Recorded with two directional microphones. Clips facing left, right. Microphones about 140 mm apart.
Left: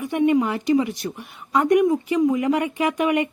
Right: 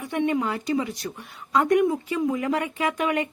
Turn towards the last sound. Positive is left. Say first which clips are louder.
# left 4 dB
turn(degrees=15)  # may be behind; listen again after turning